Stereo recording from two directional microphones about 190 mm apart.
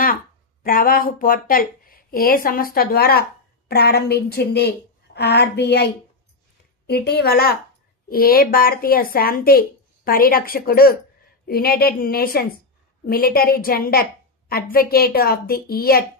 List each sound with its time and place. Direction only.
0.0 s speech: 50° left (ahead or behind)
6.9 s a woman's voice: 55° left (ahead or behind)